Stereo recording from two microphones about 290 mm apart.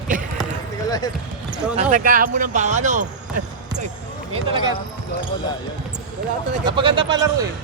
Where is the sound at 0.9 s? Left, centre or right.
Centre.